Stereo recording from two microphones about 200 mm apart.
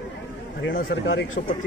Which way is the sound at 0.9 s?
75° left (ahead or behind).